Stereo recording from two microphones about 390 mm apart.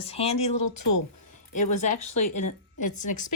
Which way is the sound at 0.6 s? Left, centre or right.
Left.